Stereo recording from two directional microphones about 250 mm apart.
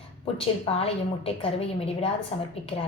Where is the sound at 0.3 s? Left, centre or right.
Left.